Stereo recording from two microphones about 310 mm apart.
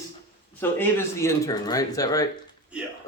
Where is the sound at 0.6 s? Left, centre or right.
Centre.